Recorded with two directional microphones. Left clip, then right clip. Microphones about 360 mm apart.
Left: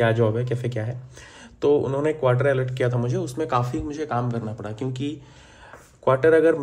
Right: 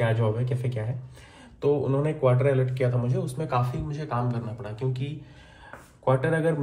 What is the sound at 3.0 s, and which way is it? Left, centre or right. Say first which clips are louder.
A man's voice: left 5 dB; left.